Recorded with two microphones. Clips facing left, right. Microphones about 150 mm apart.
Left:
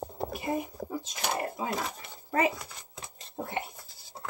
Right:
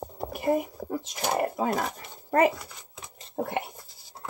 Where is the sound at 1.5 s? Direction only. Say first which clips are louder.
Right 6 dB; 55° right (ahead or behind).